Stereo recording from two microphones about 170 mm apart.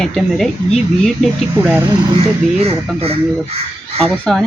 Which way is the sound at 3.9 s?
35° right (ahead or behind).